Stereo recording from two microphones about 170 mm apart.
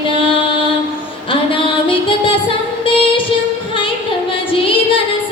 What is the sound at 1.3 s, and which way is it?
Music, 30° left (ahead or behind).